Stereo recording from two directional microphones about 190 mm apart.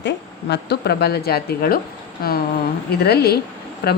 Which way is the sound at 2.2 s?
50° left (ahead or behind).